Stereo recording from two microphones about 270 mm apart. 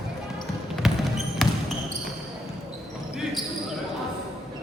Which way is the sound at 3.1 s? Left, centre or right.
Centre.